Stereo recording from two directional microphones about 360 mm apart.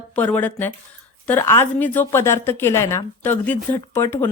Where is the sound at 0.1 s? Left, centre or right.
Centre.